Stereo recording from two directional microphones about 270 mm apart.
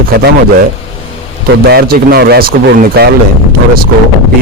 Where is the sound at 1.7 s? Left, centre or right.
Right.